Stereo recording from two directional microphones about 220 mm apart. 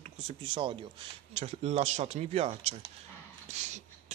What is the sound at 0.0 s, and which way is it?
Speech, 25° right (ahead or behind).